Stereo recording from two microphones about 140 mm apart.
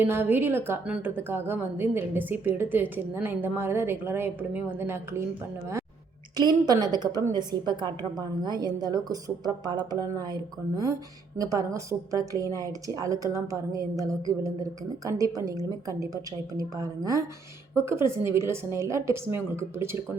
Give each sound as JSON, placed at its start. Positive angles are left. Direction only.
{"t": 0.0, "sound": "a woman's voice", "side_deg": -15}
{"t": 6.3, "sound": "a woman's voice", "side_deg": -30}
{"t": 11.3, "sound": "a woman's voice", "side_deg": -20}